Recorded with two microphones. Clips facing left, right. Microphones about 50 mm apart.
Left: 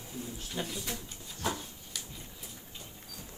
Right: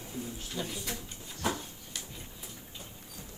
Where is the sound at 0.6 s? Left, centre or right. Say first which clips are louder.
Even; left.